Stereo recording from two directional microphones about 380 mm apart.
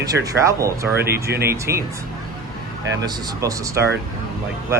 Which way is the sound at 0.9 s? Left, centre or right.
Right.